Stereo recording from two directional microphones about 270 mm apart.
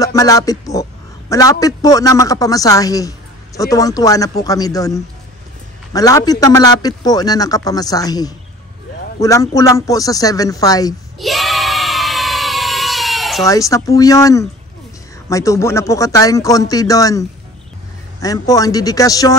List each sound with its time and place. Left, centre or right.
0.0 s music: centre
1.3 s a man's voice: centre
11.1 s a sound: centre
13.5 s a man's voice: centre